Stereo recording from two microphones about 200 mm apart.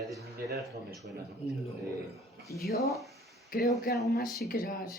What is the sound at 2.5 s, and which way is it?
Speech, 50° left (ahead or behind).